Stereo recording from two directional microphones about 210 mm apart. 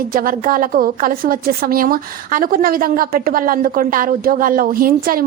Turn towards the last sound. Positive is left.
turn(degrees=-45)  # may be behind; listen again after turning